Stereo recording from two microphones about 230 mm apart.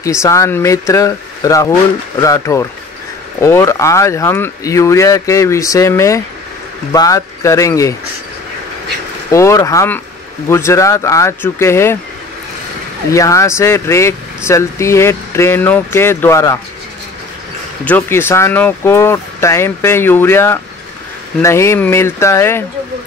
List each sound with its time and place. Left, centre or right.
0.2 s speech: centre
9.3 s speech: centre
13.1 s speech: centre
17.8 s speech: centre